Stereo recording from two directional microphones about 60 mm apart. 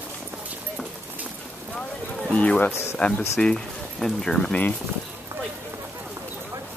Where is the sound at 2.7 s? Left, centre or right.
Left.